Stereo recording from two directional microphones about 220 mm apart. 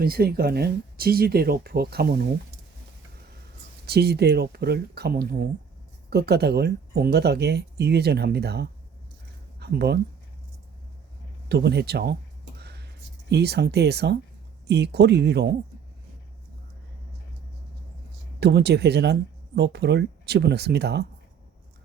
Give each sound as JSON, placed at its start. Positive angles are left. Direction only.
{"t": 0.0, "sound": "speech", "side_deg": -45}
{"t": 3.8, "sound": "speech", "side_deg": -45}
{"t": 11.4, "sound": "speech", "side_deg": -50}
{"t": 12.5, "sound": "music", "side_deg": -50}
{"t": 13.3, "sound": "speech", "side_deg": -50}
{"t": 18.3, "sound": "speech", "side_deg": -50}